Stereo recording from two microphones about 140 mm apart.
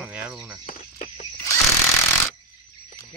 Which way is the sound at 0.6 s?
65° left (ahead or behind).